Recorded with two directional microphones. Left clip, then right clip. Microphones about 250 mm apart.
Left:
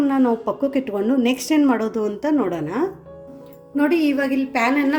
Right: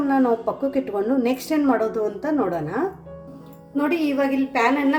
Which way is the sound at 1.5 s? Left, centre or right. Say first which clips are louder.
Left 2 dB; left.